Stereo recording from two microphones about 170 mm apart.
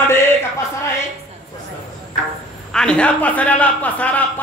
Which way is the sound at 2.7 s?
5° left (ahead or behind).